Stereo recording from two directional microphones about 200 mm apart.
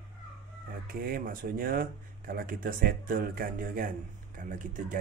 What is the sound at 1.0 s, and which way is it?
Speech, 45° right (ahead or behind).